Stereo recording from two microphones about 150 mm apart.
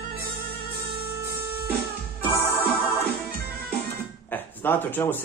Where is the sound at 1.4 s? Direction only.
15° right (ahead or behind).